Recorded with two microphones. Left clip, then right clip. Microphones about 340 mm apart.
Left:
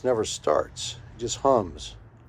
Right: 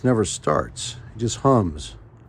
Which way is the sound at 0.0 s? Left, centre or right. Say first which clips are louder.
Right 3 dB; right.